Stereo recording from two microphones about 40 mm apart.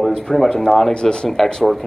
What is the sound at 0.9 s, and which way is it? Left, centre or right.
Speech, centre.